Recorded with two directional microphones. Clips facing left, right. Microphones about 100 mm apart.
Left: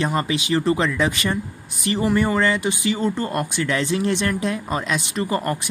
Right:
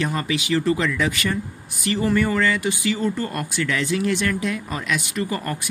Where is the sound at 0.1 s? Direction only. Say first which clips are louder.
Left 1 dB; 30° left (ahead or behind).